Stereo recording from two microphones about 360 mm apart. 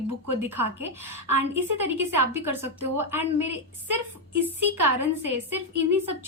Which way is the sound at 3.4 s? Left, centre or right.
Right.